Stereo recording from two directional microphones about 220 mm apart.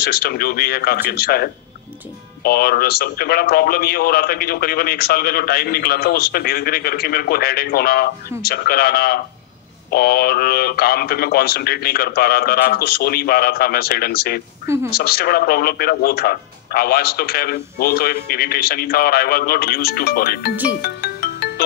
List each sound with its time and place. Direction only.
0.0 s a man's voice: 45° left (ahead or behind)
20.8 s music: 45° left (ahead or behind)